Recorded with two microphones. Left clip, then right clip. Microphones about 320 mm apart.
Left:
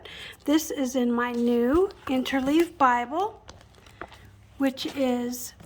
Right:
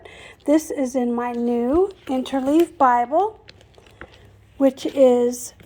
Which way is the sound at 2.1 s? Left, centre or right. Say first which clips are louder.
Right 5 dB; centre.